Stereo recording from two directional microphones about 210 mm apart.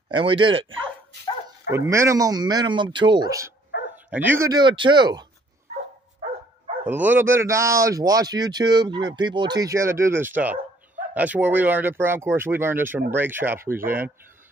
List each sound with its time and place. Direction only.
0.1 s speech: 25° right (ahead or behind)
1.7 s speech: 15° right (ahead or behind)
6.9 s speech: 10° right (ahead or behind)